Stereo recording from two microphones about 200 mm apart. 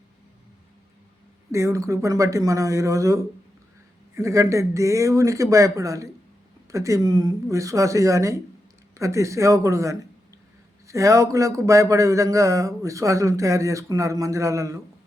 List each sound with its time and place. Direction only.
1.5 s speech: 15° right (ahead or behind)